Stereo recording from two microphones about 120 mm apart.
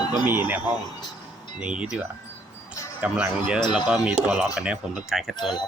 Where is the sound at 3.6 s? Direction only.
40° left (ahead or behind).